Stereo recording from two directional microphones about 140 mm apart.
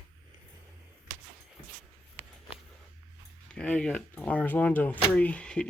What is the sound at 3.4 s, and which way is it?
Speech, 10° left (ahead or behind).